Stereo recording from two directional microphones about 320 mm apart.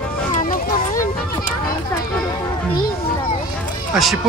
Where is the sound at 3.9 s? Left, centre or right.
Centre.